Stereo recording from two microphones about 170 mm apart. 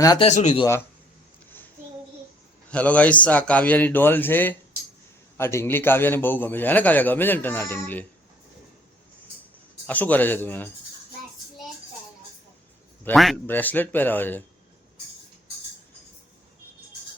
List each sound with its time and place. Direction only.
0.2 s speech: 40° left (ahead or behind)
0.6 s a man's voice: 15° left (ahead or behind)
2.6 s a man's voice: 10° left (ahead or behind)
9.8 s a man's voice: 10° left (ahead or behind)
13.3 s a man's voice: 10° left (ahead or behind)